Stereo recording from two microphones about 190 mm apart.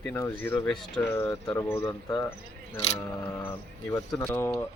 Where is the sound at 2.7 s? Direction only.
35° left (ahead or behind).